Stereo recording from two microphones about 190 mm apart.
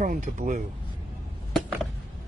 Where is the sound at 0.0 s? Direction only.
40° right (ahead or behind).